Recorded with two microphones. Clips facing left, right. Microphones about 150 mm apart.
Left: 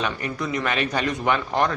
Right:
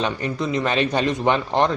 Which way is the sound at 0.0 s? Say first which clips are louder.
Right 3 dB; 25° right (ahead or behind).